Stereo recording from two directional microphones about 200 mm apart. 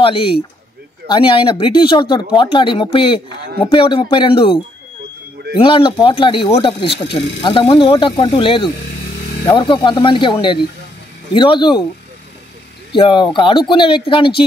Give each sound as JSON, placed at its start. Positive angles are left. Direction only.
{"t": 0.0, "sound": "speech", "side_deg": 25}
{"t": 12.9, "sound": "speech", "side_deg": 25}